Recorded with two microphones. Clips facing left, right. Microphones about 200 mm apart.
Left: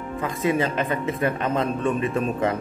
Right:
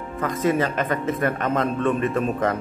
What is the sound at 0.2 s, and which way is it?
A man's voice, 15° left (ahead or behind).